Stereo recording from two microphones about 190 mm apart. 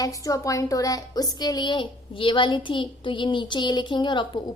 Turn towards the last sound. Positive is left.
turn(degrees=25)  # may be behind; listen again after turning